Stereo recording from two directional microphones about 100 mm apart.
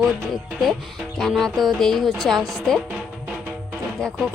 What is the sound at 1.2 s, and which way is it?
A woman's voice, centre (ahead or behind).